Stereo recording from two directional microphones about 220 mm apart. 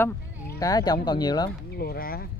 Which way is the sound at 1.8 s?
45° left (ahead or behind).